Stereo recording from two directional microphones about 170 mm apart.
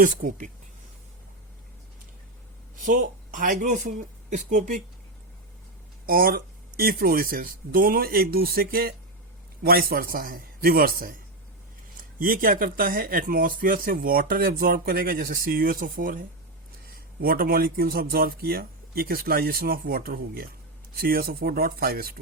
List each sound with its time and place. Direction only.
0.0 s speech: 45° right (ahead or behind)
2.7 s speech: 50° right (ahead or behind)
6.1 s speech: 60° right (ahead or behind)
12.2 s speech: 55° right (ahead or behind)